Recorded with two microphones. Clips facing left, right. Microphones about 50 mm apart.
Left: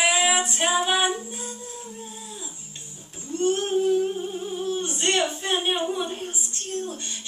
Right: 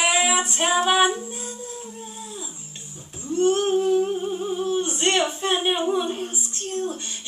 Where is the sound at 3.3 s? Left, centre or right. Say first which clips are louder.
Right 4 dB; right.